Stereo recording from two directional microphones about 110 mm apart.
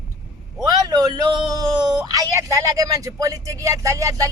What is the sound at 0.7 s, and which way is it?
Speech, 35° right (ahead or behind).